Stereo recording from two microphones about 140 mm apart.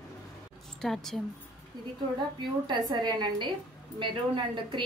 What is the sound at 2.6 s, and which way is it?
A woman's voice, 30° right (ahead or behind).